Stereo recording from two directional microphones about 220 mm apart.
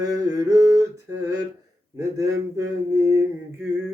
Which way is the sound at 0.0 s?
15° right (ahead or behind).